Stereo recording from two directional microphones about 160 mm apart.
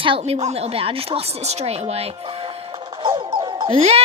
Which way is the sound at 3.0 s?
30° right (ahead or behind).